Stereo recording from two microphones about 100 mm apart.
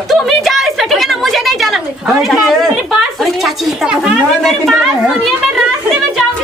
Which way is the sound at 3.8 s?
10° right (ahead or behind).